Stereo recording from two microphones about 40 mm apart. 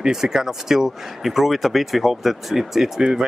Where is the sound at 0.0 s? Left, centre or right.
Centre.